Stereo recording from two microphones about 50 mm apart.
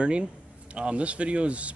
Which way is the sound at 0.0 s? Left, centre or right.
Centre.